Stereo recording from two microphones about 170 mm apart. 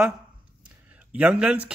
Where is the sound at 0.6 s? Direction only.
10° right (ahead or behind).